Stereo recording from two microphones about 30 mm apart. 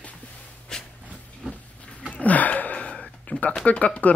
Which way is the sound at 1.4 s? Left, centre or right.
Right.